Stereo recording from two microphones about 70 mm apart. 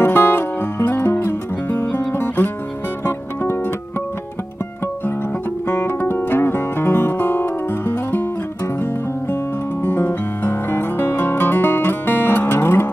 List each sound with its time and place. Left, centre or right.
0.0 s music: left
5.7 s music: left
9.8 s music: left